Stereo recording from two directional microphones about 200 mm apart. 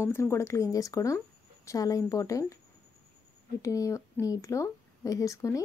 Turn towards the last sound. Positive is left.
turn(degrees=15)  # may be behind; listen again after turning